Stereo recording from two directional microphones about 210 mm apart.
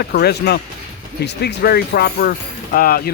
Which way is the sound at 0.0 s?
50° left (ahead or behind).